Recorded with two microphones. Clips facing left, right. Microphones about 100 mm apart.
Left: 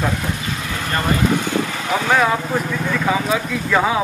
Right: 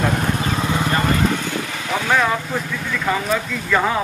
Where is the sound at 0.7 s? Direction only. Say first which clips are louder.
Right 1 dB; 15° right (ahead or behind).